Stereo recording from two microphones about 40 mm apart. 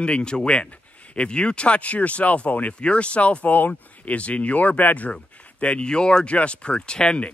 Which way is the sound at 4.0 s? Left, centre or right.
Left.